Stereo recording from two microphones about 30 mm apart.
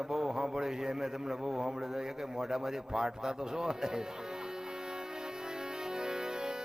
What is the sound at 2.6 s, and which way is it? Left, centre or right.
Speech, centre.